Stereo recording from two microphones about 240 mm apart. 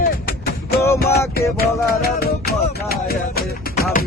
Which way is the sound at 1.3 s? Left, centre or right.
Left.